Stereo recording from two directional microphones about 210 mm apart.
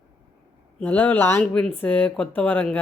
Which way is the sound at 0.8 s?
5° left (ahead or behind).